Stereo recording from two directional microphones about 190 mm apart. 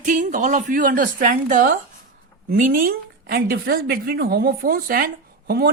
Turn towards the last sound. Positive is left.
turn(degrees=-50)  # may be behind; listen again after turning